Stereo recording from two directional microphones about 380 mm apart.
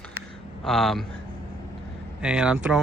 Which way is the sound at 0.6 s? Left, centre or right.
Centre.